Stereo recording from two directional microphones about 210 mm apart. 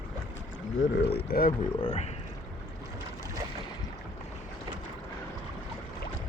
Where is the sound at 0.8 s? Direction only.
50° left (ahead or behind).